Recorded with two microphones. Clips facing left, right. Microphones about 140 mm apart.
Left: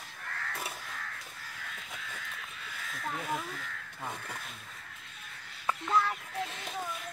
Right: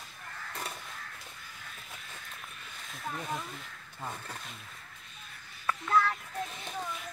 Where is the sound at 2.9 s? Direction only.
Centre (ahead or behind).